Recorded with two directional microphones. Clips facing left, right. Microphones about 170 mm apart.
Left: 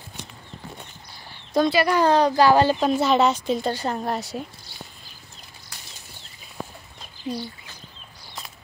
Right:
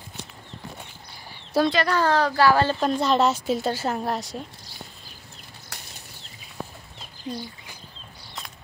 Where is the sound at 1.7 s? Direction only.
10° left (ahead or behind).